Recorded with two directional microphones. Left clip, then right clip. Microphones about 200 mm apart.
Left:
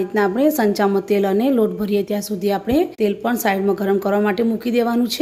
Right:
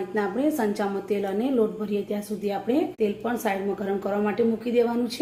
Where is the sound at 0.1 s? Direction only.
60° left (ahead or behind).